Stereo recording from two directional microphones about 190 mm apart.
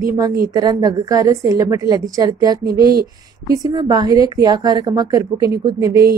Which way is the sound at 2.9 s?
50° right (ahead or behind).